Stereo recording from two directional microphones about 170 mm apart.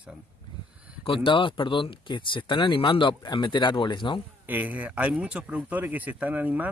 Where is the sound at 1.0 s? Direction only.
30° left (ahead or behind).